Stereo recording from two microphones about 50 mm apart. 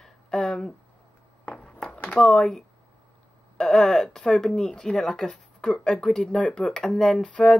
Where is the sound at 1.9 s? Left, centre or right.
Left.